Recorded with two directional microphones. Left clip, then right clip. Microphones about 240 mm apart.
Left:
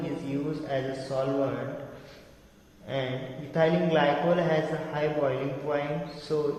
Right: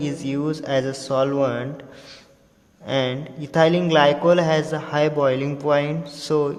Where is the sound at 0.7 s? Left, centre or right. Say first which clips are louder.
Right 9 dB; right.